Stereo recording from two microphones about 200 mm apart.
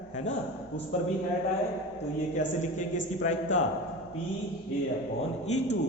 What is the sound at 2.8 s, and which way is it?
Speech, 40° left (ahead or behind).